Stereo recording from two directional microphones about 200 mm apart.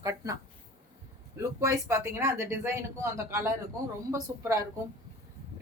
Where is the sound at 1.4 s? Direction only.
15° right (ahead or behind).